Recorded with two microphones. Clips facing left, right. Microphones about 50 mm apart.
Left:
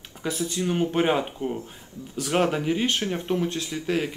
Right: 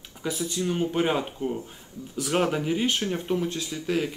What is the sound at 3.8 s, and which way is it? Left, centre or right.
Speech, centre.